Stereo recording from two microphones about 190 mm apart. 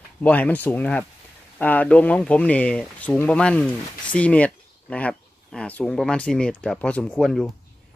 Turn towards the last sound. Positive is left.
turn(degrees=0)  # may be behind; listen again after turning